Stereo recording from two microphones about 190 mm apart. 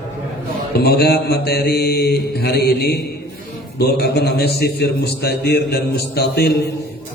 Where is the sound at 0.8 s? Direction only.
60° left (ahead or behind).